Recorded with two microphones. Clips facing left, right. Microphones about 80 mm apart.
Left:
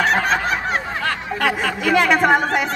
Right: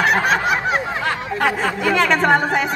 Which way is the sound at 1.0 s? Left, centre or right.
Centre.